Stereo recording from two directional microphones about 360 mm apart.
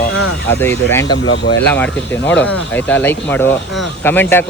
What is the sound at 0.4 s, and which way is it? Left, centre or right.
Speech, centre.